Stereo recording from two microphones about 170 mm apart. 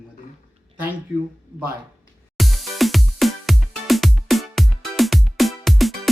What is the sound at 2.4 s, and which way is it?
Music, centre (ahead or behind).